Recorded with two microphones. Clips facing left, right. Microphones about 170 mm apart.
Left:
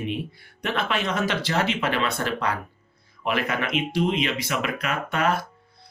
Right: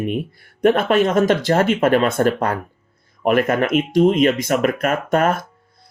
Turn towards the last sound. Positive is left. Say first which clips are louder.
# right 6 dB
turn(degrees=-45)  # may be behind; listen again after turning